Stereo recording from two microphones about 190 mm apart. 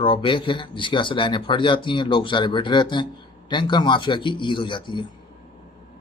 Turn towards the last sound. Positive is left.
turn(degrees=25)  # may be behind; listen again after turning